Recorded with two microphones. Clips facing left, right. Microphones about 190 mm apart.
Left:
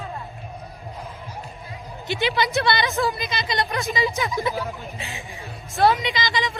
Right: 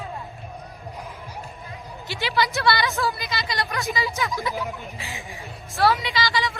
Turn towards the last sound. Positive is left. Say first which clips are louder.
# even
turn(degrees=20)  # may be behind; listen again after turning